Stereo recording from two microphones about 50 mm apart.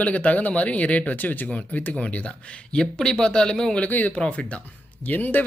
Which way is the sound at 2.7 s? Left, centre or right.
Centre.